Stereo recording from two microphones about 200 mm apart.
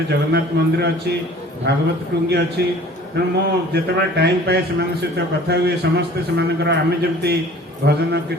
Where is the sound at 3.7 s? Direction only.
55° right (ahead or behind).